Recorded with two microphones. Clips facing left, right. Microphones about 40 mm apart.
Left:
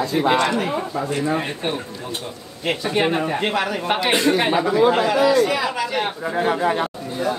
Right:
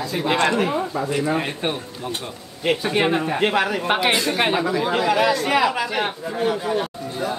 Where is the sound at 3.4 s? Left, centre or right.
Centre.